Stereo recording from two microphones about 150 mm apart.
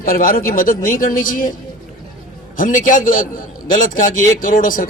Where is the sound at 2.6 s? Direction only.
60° left (ahead or behind).